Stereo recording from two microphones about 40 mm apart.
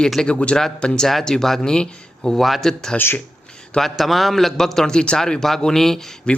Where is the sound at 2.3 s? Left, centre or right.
Centre.